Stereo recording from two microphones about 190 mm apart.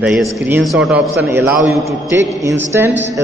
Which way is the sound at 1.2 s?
10° right (ahead or behind).